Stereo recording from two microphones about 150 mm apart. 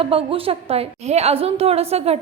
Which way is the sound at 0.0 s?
40° right (ahead or behind).